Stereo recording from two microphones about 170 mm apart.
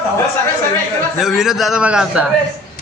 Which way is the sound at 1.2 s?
Centre (ahead or behind).